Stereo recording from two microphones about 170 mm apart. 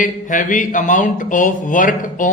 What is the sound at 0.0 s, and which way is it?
Speech, 50° left (ahead or behind).